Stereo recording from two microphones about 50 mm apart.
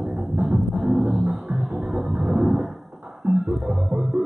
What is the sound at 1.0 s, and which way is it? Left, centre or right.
Music, right.